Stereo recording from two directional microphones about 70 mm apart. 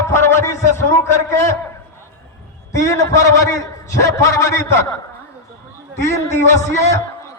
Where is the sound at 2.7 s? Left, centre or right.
Left.